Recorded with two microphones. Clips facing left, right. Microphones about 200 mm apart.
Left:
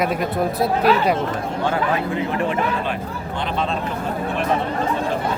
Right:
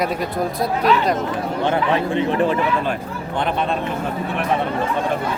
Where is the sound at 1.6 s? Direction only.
30° right (ahead or behind).